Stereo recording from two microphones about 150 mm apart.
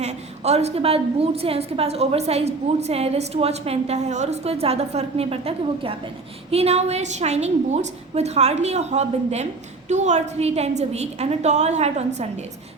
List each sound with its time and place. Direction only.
0.0 s a woman's voice: 45° right (ahead or behind)